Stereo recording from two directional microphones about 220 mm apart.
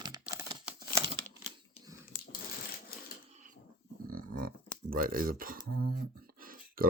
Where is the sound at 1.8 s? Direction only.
25° left (ahead or behind).